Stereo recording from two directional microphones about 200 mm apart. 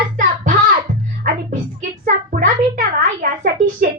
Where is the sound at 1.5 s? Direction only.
40° right (ahead or behind).